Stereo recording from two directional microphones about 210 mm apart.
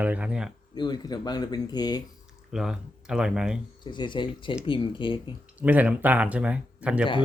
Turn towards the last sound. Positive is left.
turn(degrees=-5)  # may be behind; listen again after turning